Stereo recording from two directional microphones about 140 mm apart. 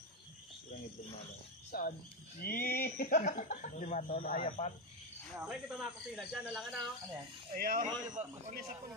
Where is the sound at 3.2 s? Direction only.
60° left (ahead or behind); by 4.4 s 90° left.